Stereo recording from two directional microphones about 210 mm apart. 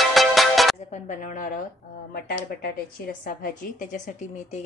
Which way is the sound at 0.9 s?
35° left (ahead or behind).